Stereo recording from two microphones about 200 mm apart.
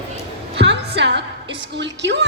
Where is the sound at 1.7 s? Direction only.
60° right (ahead or behind).